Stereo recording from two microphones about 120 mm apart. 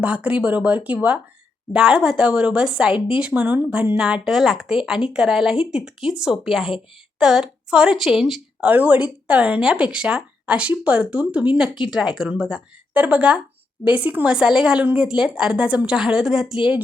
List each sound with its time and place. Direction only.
0.0 s a woman's voice: 10° right (ahead or behind)